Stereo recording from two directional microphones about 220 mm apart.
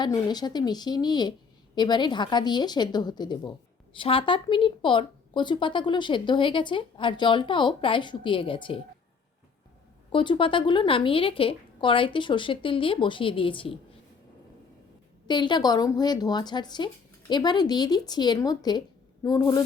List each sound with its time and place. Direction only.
0.0 s speech: 20° left (ahead or behind)
10.1 s speech: 20° left (ahead or behind)
15.3 s a woman's voice: 20° left (ahead or behind)